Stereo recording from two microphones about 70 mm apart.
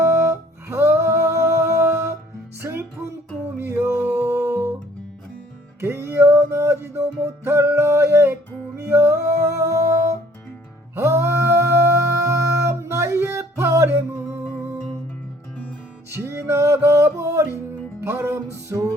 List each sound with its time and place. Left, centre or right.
0.0 s music: right
5.8 s music: right
10.9 s a sound: right
16.1 s music: right